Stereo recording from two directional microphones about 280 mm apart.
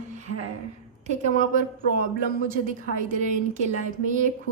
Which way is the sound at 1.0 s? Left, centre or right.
Right.